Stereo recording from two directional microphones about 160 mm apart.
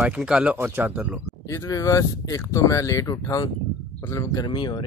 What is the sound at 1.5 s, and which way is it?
Speech, 20° left (ahead or behind).